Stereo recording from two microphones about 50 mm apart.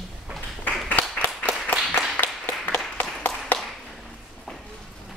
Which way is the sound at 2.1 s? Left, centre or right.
Left.